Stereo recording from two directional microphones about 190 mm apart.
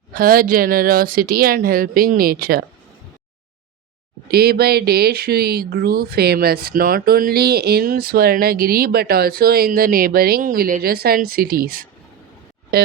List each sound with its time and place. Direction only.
0.1 s speech: 50° right (ahead or behind)
4.3 s speech: 55° right (ahead or behind)